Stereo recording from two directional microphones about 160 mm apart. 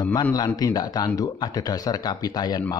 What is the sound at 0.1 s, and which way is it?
Speech, 25° left (ahead or behind).